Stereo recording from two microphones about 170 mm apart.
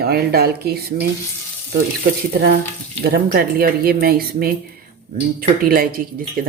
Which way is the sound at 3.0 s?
60° right (ahead or behind).